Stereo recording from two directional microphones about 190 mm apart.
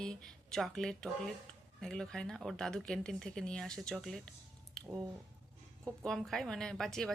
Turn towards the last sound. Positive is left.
turn(degrees=0)  # may be behind; listen again after turning